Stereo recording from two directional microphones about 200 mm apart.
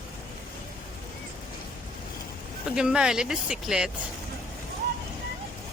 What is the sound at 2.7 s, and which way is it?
A woman's voice, 5° right (ahead or behind).